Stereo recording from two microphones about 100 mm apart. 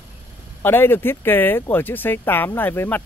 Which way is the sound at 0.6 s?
20° left (ahead or behind).